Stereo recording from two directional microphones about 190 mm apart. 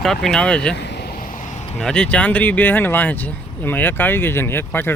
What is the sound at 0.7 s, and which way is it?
Vehicle, 60° left (ahead or behind).